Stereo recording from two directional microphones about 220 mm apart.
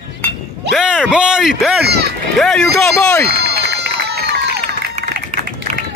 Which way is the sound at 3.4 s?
45° right (ahead or behind).